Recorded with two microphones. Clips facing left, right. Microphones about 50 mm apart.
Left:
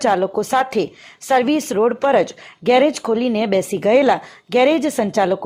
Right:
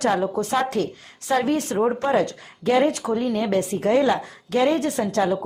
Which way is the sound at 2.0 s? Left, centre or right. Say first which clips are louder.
Left 6 dB; left.